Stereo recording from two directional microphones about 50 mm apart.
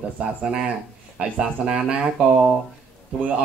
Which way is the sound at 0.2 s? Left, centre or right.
Centre.